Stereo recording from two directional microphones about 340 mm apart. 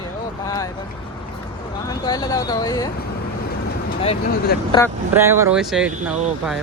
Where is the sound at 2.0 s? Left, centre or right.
Centre.